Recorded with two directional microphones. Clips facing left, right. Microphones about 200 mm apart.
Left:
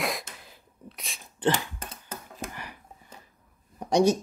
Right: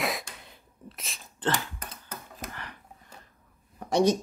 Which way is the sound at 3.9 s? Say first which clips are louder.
Left 1 dB; 10° left (ahead or behind).